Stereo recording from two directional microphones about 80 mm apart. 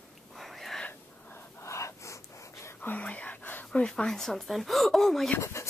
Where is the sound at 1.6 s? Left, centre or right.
Left.